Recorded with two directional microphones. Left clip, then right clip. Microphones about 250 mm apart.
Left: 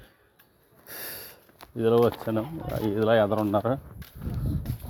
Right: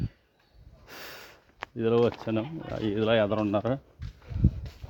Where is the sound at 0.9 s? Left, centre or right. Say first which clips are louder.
Left 2 dB; centre.